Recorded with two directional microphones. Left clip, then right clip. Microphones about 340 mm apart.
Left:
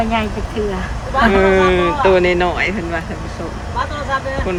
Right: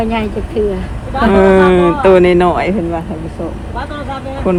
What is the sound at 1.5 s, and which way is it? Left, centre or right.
Speech, centre.